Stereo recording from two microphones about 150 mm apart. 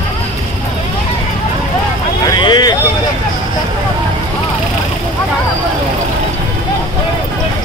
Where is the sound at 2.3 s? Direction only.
30° left (ahead or behind).